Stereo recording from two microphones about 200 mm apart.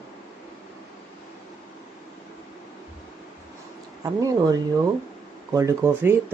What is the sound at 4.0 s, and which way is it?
Speech, 20° right (ahead or behind).